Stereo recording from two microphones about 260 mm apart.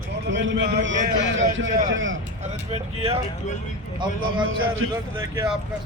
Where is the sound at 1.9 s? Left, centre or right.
Right.